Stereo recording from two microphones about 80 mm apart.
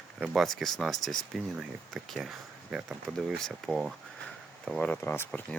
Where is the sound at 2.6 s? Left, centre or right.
Centre.